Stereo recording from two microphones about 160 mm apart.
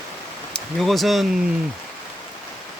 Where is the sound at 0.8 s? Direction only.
Centre (ahead or behind).